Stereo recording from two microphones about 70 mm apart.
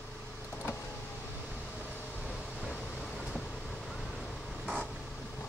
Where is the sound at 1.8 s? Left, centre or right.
Left; by 4.8 s centre.